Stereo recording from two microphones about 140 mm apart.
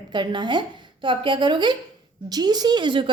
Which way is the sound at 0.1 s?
35° right (ahead or behind).